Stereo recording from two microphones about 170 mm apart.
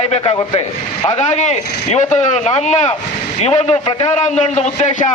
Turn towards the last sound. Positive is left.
turn(degrees=45)  # may be behind; listen again after turning